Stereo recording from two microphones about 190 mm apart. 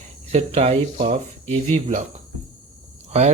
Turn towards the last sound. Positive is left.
turn(degrees=-35)  # may be behind; listen again after turning